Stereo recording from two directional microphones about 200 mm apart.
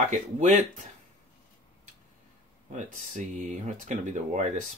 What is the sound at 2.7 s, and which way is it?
Speech, 40° right (ahead or behind).